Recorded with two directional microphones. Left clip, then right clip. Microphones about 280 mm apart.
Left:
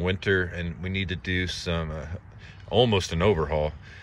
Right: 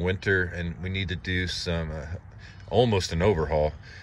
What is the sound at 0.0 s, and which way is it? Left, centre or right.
Speech, centre.